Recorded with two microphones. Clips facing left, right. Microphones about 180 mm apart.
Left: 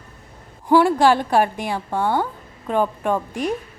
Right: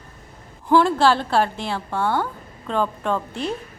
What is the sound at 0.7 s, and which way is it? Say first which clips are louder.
A woman's voice: left 2 dB; 10° left (ahead or behind).